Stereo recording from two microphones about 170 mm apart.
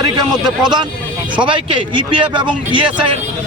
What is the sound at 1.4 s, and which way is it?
A man's voice, 30° right (ahead or behind).